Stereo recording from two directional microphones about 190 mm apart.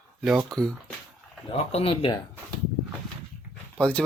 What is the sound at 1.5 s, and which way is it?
Speech, 30° left (ahead or behind).